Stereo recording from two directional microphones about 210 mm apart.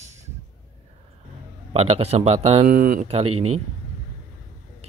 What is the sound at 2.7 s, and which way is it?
Speech, 45° right (ahead or behind).